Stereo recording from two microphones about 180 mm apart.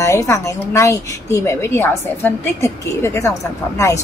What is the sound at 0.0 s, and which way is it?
Speech, 15° left (ahead or behind).